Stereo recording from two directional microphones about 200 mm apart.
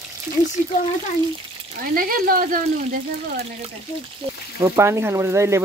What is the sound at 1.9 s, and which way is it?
Speech, 45° right (ahead or behind).